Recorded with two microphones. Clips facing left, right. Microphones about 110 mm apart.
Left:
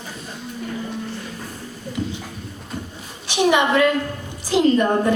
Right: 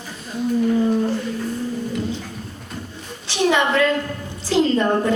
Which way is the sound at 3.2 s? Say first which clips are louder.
Left 1 dB; 15° left (ahead or behind).